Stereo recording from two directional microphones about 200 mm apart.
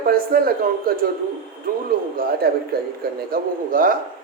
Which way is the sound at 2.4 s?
50° right (ahead or behind).